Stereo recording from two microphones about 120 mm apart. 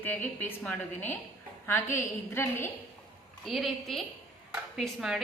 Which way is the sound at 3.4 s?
Centre (ahead or behind).